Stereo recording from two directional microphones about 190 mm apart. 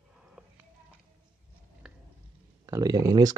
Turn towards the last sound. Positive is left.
turn(degrees=-20)  # may be behind; listen again after turning